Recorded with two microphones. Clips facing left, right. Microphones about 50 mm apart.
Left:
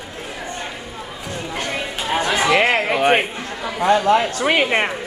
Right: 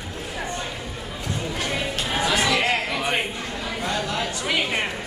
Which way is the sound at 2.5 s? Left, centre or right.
Left.